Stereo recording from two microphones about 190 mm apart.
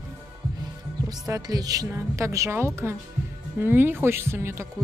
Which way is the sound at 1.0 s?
20° right (ahead or behind).